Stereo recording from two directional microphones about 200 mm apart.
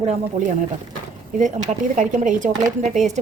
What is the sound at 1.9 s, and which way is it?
A woman's voice, 40° right (ahead or behind).